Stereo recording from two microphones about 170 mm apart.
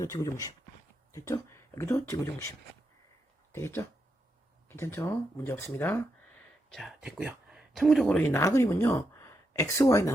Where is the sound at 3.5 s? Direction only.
15° left (ahead or behind).